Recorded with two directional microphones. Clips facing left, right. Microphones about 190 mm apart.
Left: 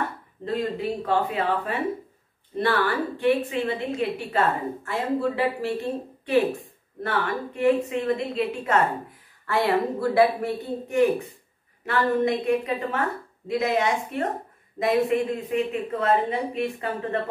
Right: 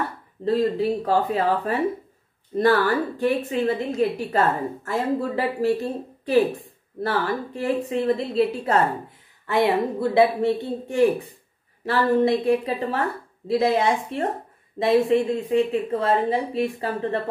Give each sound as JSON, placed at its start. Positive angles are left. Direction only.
{"t": 0.5, "sound": "speech", "side_deg": -35}
{"t": 9.5, "sound": "speech", "side_deg": -20}